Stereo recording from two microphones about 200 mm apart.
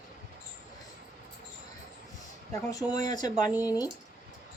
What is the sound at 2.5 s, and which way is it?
Speech, 15° left (ahead or behind).